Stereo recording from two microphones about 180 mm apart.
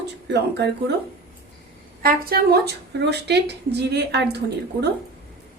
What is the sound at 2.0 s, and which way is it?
A woman's voice, 55° right (ahead or behind).